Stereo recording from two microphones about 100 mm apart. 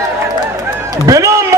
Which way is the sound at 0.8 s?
35° right (ahead or behind).